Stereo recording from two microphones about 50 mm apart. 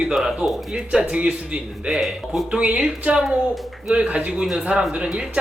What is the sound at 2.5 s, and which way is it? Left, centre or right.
A man's voice, centre.